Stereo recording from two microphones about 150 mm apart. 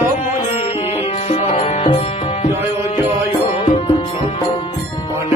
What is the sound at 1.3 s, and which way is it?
Music, 50° left (ahead or behind).